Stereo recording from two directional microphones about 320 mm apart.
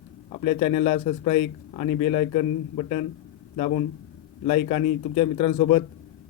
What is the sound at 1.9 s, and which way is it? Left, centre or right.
Speech, left.